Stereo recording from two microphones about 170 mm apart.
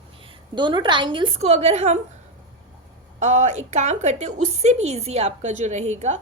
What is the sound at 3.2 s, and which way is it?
A woman's voice, 45° right (ahead or behind).